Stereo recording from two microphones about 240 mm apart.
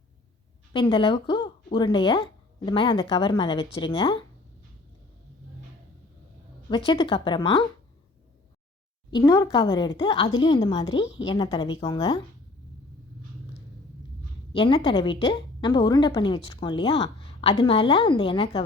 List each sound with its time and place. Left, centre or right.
0.7 s a woman's voice: left
6.7 s a woman's voice: left
9.0 s a woman's voice: centre
11.0 s a woman's voice: left
11.3 s a woman's voice: centre
14.5 s a woman's voice: left